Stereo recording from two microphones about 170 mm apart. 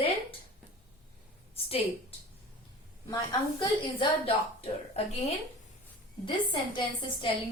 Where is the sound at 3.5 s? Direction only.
30° left (ahead or behind).